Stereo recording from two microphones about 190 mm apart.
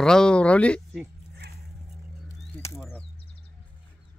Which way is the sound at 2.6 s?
15° left (ahead or behind).